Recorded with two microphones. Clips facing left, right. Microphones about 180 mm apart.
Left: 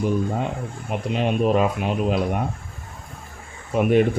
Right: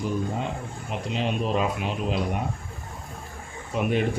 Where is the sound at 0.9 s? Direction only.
55° left (ahead or behind).